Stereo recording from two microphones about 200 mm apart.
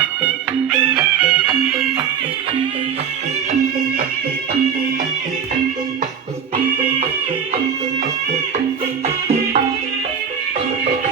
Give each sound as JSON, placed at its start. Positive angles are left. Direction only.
{"t": 0.8, "sound": "music", "side_deg": -10}
{"t": 9.0, "sound": "music", "side_deg": -35}